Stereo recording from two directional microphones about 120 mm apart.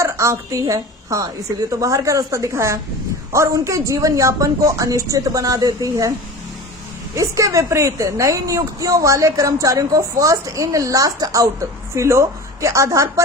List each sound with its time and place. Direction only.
0.0 s a woman's voice: 25° right (ahead or behind)
7.2 s a woman's voice: 25° right (ahead or behind)